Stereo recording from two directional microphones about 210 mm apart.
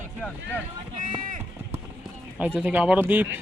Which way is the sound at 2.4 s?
10° right (ahead or behind).